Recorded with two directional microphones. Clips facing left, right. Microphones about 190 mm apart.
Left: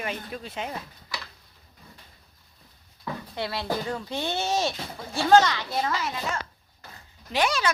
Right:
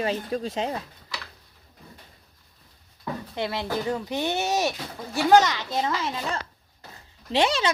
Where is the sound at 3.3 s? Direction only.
20° right (ahead or behind).